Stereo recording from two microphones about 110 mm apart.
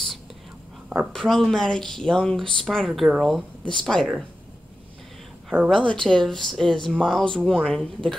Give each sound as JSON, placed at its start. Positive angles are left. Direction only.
{"t": 1.1, "sound": "speech", "side_deg": 5}
{"t": 5.7, "sound": "speech", "side_deg": 5}